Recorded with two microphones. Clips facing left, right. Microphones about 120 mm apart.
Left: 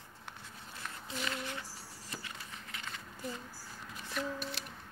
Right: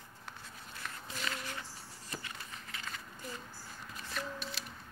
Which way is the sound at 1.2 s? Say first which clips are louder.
Left 2 dB; 20° left (ahead or behind).